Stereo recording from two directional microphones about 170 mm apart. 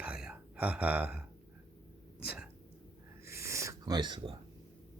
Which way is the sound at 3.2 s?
15° right (ahead or behind).